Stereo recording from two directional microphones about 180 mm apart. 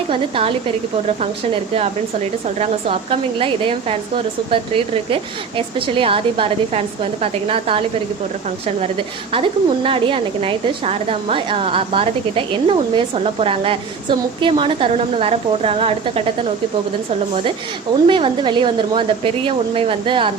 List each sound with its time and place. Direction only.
0.1 s a woman's voice: 30° right (ahead or behind)
2.6 s a woman's voice: 35° right (ahead or behind)
9.3 s a woman's voice: 30° right (ahead or behind)
18.1 s speech: 25° right (ahead or behind)